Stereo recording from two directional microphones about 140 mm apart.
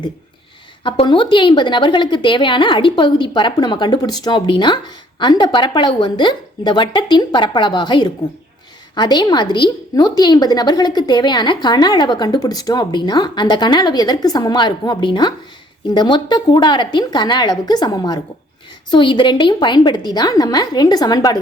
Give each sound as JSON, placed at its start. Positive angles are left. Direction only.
{"t": 0.9, "sound": "a woman's voice", "side_deg": 35}